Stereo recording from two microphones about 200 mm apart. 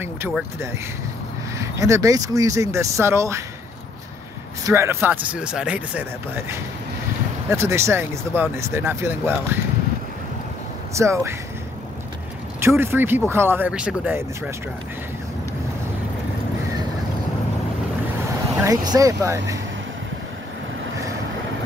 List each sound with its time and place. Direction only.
0.0 s a sound: 10° right (ahead or behind)
1.6 s speech: 15° right (ahead or behind)
4.6 s speech: 15° right (ahead or behind)
11.0 s speech: 15° right (ahead or behind)
12.6 s speech: 10° right (ahead or behind)
18.6 s speech: 15° right (ahead or behind)